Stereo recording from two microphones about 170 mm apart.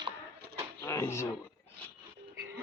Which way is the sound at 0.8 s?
15° left (ahead or behind).